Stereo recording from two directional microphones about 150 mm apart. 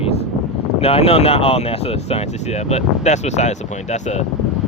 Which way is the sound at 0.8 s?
40° left (ahead or behind).